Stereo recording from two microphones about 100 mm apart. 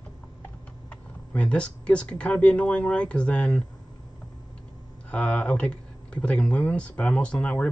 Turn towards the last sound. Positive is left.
turn(degrees=10)  # may be behind; listen again after turning